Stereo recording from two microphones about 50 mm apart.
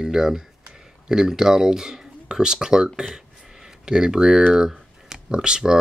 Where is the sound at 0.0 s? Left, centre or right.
Centre.